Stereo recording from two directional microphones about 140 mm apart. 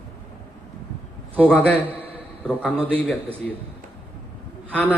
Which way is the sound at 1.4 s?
10° left (ahead or behind).